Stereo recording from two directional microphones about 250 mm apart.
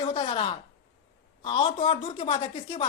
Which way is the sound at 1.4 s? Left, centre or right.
Left.